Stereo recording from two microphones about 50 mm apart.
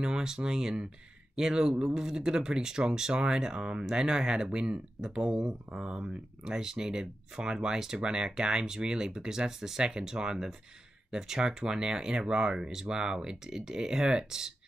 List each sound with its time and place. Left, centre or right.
0.0 s speech: centre